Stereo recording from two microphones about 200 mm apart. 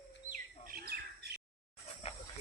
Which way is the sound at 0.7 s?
50° right (ahead or behind).